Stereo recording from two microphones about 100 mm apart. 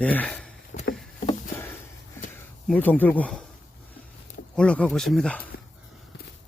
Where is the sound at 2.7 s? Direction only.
15° left (ahead or behind).